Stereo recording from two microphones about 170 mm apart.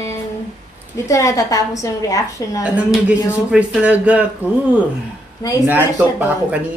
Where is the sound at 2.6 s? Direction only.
5° right (ahead or behind).